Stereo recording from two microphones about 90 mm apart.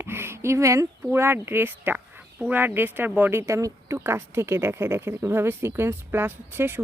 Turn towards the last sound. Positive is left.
turn(degrees=-25)  # may be behind; listen again after turning